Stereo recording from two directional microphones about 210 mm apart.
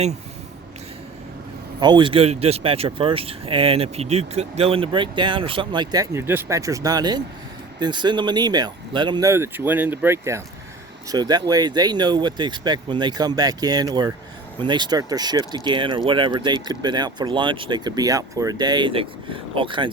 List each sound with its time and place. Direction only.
1.8 s speech: 20° right (ahead or behind)